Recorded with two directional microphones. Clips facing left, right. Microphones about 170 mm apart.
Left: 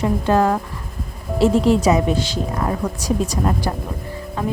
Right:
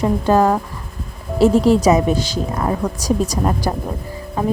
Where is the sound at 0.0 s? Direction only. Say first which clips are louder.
Right 2 dB; 35° right (ahead or behind).